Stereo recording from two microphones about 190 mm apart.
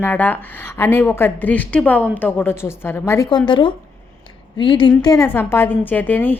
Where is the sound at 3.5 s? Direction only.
25° left (ahead or behind); by 6.4 s 10° left (ahead or behind).